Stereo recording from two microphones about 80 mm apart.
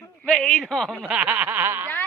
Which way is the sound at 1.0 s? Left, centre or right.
Centre.